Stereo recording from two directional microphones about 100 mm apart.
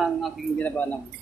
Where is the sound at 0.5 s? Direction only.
15° left (ahead or behind).